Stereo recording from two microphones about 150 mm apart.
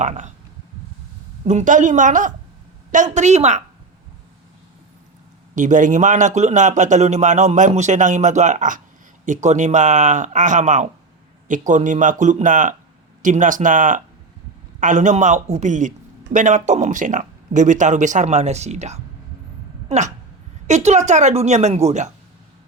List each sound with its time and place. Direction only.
0.0 s speech: 50° right (ahead or behind)
1.5 s a man's voice: 55° right (ahead or behind)
5.5 s a man's voice: 60° right (ahead or behind)